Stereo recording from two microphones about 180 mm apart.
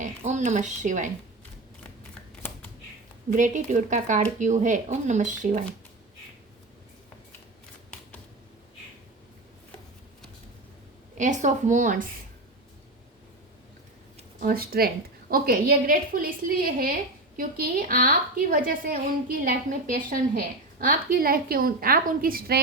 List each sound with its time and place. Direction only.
0.0 s speech: 40° right (ahead or behind)
3.2 s a woman's voice: 45° right (ahead or behind)
11.2 s a woman's voice: 45° right (ahead or behind)
14.3 s a woman's voice: 55° right (ahead or behind)